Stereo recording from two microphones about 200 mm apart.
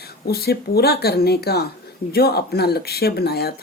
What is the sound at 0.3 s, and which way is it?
A woman's voice, 50° left (ahead or behind).